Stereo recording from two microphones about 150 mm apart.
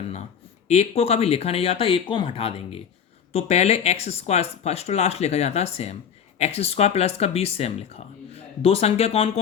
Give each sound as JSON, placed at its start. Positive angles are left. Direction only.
{"t": 0.7, "sound": "speech", "side_deg": 45}